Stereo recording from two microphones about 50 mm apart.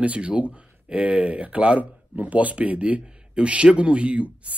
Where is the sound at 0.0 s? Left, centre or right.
Right.